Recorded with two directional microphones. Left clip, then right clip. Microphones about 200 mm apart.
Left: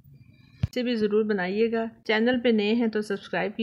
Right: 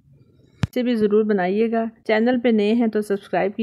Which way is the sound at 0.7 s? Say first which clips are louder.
Right 6 dB; 45° right (ahead or behind).